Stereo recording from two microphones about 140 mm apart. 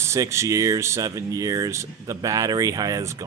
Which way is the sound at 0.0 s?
20° right (ahead or behind).